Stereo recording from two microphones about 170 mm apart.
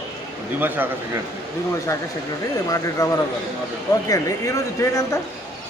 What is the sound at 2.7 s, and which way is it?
Speech, 20° left (ahead or behind).